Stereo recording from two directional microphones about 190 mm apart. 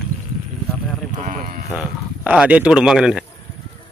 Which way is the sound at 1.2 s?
45° right (ahead or behind).